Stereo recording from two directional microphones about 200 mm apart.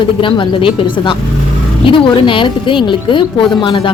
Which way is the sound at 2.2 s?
25° left (ahead or behind).